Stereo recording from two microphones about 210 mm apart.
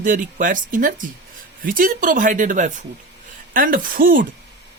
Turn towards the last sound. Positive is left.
turn(degrees=-40)  # may be behind; listen again after turning